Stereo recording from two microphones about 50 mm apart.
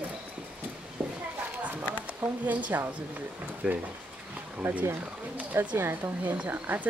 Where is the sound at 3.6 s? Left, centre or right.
Right.